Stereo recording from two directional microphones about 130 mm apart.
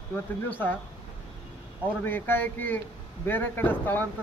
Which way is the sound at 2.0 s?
15° left (ahead or behind).